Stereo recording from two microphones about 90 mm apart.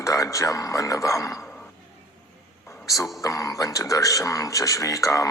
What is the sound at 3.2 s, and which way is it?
Speech, 40° left (ahead or behind).